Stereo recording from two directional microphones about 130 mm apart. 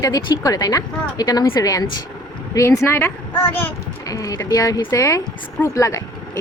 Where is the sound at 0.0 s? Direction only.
30° left (ahead or behind).